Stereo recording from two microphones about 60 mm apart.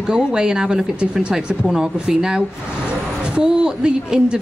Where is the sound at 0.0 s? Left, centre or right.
Centre.